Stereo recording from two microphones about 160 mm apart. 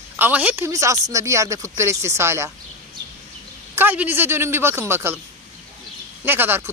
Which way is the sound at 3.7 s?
10° right (ahead or behind).